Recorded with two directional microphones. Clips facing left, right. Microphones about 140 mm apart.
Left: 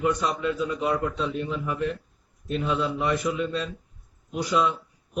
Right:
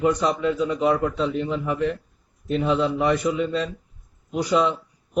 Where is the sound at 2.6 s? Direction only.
65° right (ahead or behind).